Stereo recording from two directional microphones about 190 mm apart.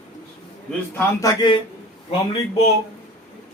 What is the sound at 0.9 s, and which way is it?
Speech, 20° left (ahead or behind).